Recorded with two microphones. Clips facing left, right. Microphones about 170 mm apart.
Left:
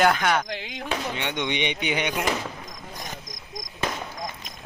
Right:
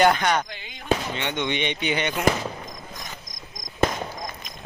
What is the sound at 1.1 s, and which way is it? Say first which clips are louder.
Speech: right 1 dB; 10° left (ahead or behind).